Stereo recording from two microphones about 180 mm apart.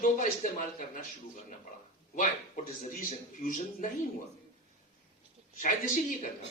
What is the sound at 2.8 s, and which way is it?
Speech, 45° left (ahead or behind).